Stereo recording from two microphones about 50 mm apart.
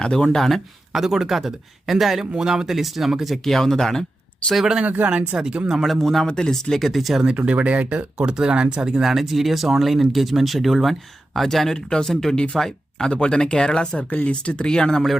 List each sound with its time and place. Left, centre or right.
0.0 s speech: centre
3.3 s speech: centre
4.5 s speech: centre
5.8 s speech: centre
6.2 s speech: centre
7.4 s speech: right; by 15.1 s centre